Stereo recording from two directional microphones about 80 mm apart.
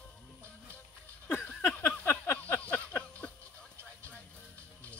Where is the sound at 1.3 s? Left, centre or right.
Left.